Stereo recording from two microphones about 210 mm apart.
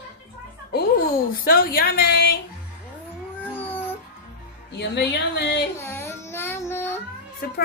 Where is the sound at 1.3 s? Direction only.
45° left (ahead or behind).